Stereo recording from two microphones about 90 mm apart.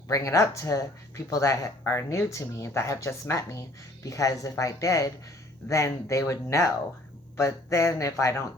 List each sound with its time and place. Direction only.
0.1 s speech: 35° left (ahead or behind)